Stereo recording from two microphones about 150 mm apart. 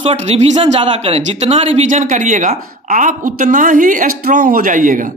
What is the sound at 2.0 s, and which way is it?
A woman's voice, 55° right (ahead or behind).